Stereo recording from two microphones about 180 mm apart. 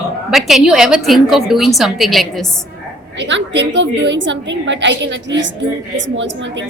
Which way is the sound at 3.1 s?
80° right.